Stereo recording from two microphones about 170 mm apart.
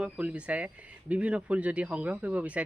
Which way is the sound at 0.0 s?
5° right (ahead or behind).